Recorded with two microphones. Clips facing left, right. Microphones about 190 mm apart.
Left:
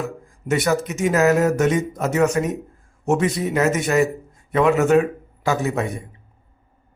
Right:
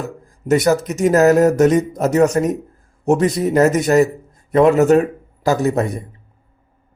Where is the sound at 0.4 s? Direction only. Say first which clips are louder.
Right 5 dB; 40° right (ahead or behind).